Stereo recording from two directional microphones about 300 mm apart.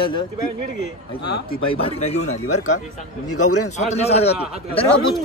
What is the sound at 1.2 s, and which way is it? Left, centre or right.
Speech, left.